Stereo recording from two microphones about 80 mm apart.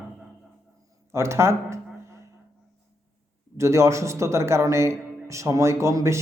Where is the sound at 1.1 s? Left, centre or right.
Right.